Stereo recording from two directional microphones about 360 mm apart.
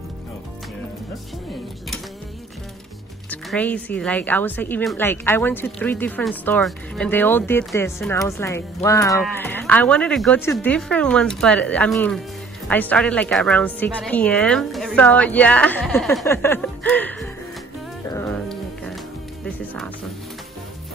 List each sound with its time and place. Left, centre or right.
3.3 s speech: centre
18.1 s music: centre
19.4 s speech: centre